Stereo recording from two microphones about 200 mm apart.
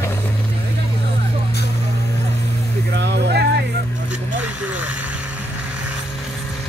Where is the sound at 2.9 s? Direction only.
60° right (ahead or behind).